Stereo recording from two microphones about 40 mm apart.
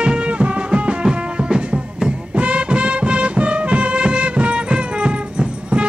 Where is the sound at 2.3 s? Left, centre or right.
Right.